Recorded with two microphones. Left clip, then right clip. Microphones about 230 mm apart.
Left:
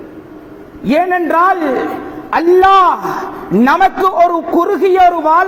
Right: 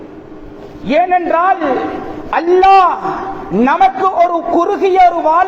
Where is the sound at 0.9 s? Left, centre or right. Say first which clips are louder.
Right 1 dB; left.